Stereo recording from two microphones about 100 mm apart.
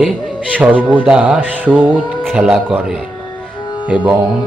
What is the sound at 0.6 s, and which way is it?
A man's voice, 15° right (ahead or behind).